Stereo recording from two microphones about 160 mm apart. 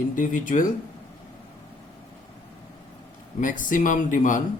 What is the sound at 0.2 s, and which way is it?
Speech, 55° left (ahead or behind).